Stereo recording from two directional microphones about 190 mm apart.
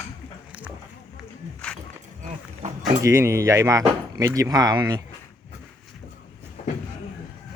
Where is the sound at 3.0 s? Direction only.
15° right (ahead or behind).